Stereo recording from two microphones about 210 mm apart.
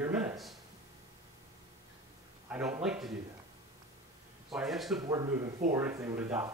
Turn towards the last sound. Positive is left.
turn(degrees=-10)  # may be behind; listen again after turning